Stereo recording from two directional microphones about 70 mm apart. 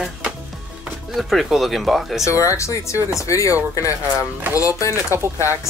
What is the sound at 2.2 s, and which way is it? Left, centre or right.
Speech, left.